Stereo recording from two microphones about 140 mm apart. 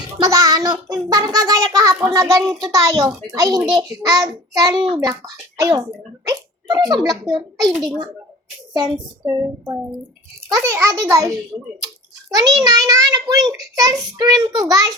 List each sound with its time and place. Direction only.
0.0 s a child's voice: 25° right (ahead or behind)
8.7 s a woman's voice: 30° right (ahead or behind)